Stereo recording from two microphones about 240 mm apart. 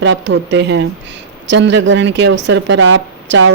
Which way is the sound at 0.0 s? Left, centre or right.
Right.